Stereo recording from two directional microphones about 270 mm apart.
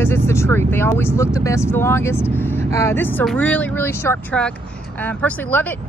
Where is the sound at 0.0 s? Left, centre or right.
Centre.